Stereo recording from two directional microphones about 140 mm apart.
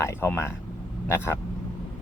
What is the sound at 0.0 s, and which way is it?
Speech, 20° left (ahead or behind).